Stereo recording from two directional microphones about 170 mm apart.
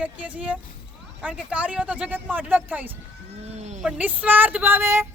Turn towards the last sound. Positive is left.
turn(degrees=-15)  # may be behind; listen again after turning